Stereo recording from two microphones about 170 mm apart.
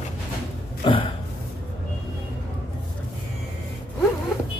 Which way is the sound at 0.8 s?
30° left (ahead or behind).